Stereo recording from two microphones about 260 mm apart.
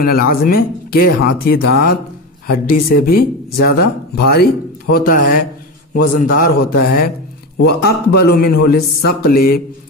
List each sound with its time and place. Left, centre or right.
0.0 s speech: left